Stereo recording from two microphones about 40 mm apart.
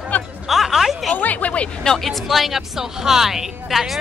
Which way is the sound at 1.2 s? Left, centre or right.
Left.